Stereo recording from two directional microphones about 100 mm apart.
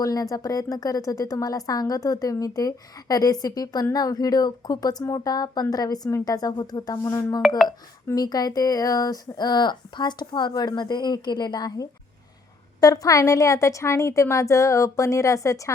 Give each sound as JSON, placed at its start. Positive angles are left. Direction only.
{"t": 0.0, "sound": "speech", "side_deg": 35}